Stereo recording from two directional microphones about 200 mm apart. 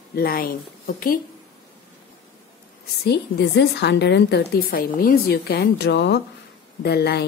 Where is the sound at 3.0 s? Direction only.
55° left (ahead or behind).